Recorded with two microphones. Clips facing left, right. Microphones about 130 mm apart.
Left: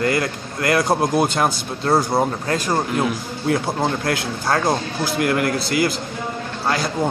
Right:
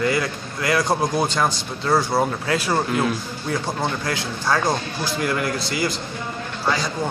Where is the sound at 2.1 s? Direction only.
20° left (ahead or behind).